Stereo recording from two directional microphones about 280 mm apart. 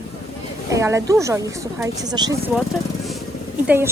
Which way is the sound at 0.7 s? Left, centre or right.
Centre.